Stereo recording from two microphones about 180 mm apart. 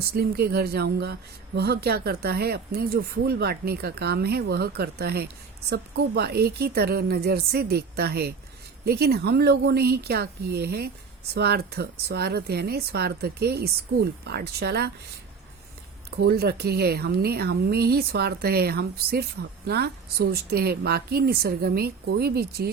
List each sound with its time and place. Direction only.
0.1 s speech: 60° right (ahead or behind)
16.1 s speech: 60° right (ahead or behind)